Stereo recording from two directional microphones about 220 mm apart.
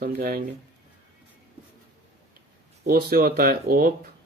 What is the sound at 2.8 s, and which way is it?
Speech, 40° right (ahead or behind).